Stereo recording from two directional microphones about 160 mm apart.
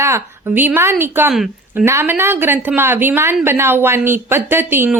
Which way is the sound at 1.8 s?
15° right (ahead or behind).